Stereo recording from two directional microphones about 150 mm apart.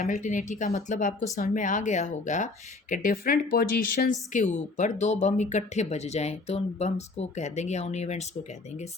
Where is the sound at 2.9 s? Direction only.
65° left (ahead or behind); by 4.1 s 80° left.